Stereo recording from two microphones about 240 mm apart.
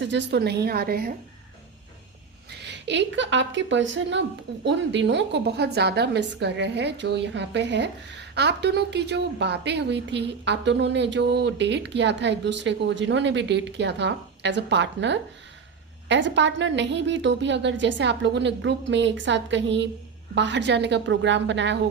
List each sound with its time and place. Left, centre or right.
0.0 s a woman's voice: right
2.5 s a woman's voice: right